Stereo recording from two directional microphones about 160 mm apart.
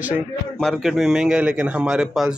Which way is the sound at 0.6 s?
Centre (ahead or behind).